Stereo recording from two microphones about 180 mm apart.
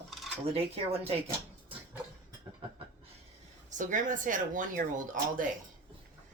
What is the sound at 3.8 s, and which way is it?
Speech, 45° right (ahead or behind).